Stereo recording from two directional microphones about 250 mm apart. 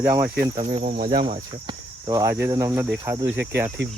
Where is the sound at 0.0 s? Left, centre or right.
Centre.